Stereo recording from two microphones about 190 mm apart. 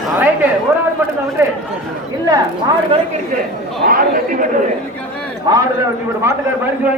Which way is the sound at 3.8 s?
45° right (ahead or behind).